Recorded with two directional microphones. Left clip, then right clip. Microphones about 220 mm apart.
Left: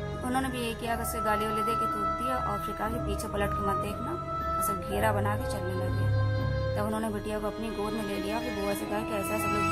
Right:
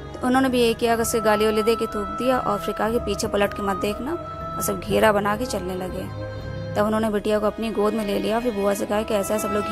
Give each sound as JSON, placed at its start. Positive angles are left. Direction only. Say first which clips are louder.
{"t": 0.2, "sound": "speech", "louder": "right 13 dB", "side_deg": -30}
{"t": 4.9, "sound": "speech", "louder": "right 12 dB", "side_deg": -35}
{"t": 6.8, "sound": "speech", "louder": "right 10 dB", "side_deg": -30}